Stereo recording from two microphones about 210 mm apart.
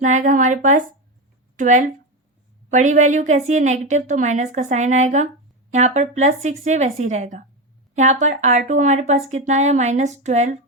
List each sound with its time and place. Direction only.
0.0 s a woman's voice: 35° right (ahead or behind)